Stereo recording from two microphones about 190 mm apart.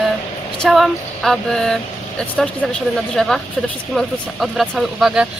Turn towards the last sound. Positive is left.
turn(degrees=-5)  # may be behind; listen again after turning